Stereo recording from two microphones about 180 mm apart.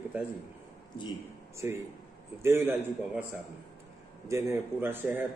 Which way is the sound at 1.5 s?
15° right (ahead or behind).